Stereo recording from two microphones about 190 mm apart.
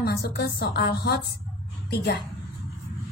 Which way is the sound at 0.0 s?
55° left (ahead or behind).